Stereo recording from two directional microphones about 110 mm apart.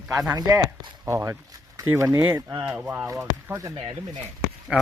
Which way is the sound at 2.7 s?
15° right (ahead or behind).